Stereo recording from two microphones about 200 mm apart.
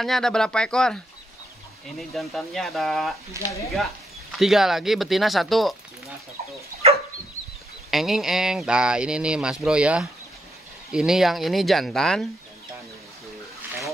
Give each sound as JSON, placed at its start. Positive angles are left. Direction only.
{"t": 0.0, "sound": "speech", "side_deg": 0}
{"t": 3.4, "sound": "speech", "side_deg": 15}
{"t": 4.4, "sound": "speech", "side_deg": 0}
{"t": 7.9, "sound": "speech", "side_deg": 0}